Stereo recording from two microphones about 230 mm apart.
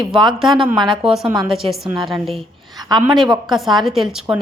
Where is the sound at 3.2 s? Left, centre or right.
Centre.